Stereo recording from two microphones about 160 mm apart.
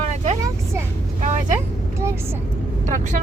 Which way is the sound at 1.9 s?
15° right (ahead or behind).